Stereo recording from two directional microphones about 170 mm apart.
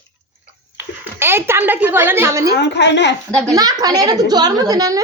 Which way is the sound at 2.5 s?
90° left.